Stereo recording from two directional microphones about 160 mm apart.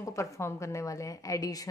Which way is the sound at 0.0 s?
20° left (ahead or behind).